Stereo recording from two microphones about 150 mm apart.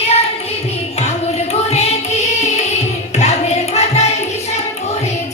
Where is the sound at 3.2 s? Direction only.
45° left (ahead or behind).